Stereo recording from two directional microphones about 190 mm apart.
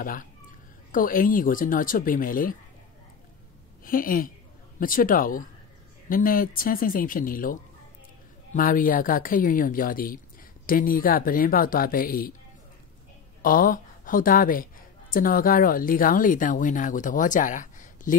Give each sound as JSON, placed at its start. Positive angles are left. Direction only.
{"t": 0.0, "sound": "speech", "side_deg": 45}
{"t": 3.8, "sound": "speech", "side_deg": 50}
{"t": 8.5, "sound": "speech", "side_deg": 45}
{"t": 13.4, "sound": "a woman's voice", "side_deg": 45}